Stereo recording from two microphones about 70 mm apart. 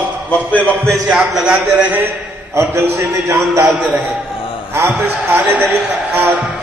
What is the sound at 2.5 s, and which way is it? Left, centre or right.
Speech, right.